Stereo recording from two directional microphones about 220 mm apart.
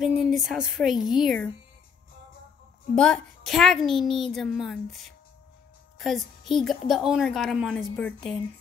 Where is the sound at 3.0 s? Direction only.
Centre (ahead or behind).